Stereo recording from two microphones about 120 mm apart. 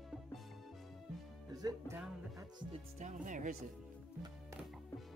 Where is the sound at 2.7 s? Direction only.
80° right.